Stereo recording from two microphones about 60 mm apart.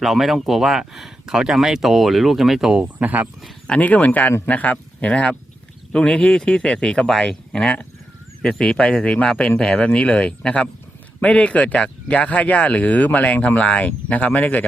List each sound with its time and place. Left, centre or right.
0.0 s speech: centre
3.0 s speech: right
3.7 s speech: left